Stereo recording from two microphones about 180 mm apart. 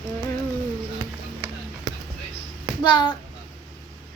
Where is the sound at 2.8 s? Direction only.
25° left (ahead or behind).